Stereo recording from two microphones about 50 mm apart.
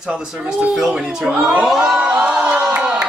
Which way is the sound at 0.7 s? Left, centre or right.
Centre.